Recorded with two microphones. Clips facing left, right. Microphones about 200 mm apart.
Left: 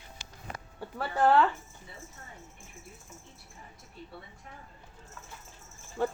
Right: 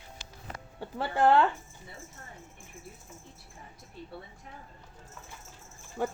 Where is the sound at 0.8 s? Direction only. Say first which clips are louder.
Right 1 dB; 25° right (ahead or behind).